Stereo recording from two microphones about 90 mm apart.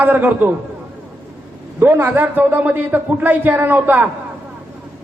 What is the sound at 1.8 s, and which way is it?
A man's voice, 20° right (ahead or behind).